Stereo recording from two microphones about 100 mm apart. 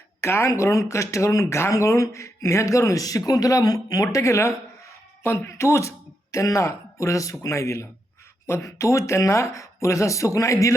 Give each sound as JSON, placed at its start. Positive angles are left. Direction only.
{"t": 0.2, "sound": "speech", "side_deg": 25}